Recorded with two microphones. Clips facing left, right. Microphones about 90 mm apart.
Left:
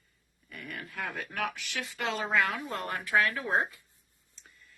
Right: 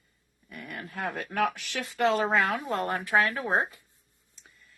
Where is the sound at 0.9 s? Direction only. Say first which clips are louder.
Right 6 dB; 40° right (ahead or behind).